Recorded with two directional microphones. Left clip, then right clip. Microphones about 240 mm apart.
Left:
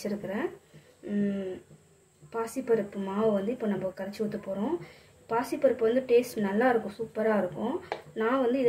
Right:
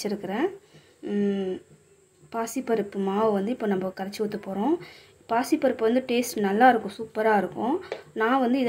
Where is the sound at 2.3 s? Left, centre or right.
Right.